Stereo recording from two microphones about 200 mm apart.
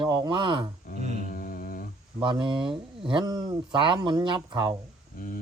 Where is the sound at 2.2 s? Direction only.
25° right (ahead or behind).